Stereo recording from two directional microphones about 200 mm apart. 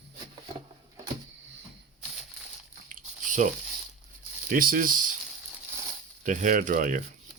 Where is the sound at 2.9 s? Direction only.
40° right (ahead or behind).